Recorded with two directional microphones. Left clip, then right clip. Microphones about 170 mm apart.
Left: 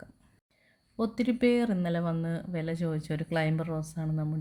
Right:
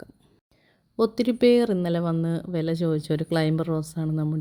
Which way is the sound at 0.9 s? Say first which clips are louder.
Right 8 dB; 35° right (ahead or behind).